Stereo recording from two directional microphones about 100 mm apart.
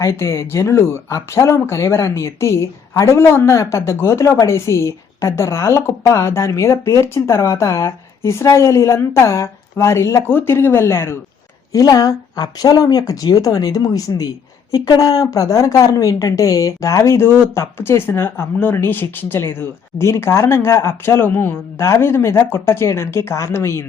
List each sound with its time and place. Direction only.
0.0 s speech: 25° left (ahead or behind)
11.7 s speech: 35° left (ahead or behind)